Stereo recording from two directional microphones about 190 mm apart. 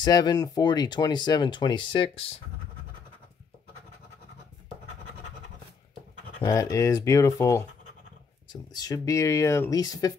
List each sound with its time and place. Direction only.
0.0 s speech: 20° left (ahead or behind)
6.4 s speech: 20° left (ahead or behind)